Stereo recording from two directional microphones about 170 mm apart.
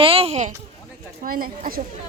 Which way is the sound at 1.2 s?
55° right (ahead or behind).